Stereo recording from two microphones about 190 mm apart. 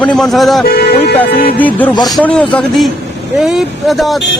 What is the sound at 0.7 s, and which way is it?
Music, 55° left (ahead or behind).